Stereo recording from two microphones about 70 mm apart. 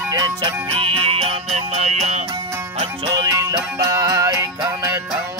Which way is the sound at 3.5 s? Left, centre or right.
Right.